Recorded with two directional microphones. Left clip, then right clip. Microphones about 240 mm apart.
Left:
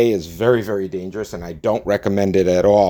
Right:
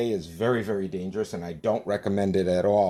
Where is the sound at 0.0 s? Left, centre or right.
Left.